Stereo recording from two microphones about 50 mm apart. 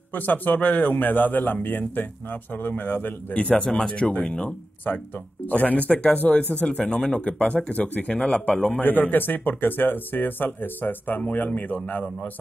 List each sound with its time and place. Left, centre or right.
0.1 s speech: left
3.3 s speech: left
8.8 s speech: left